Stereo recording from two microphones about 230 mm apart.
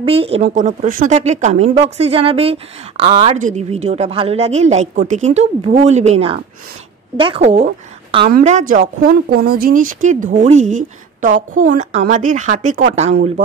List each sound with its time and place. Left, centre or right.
0.0 s speech: right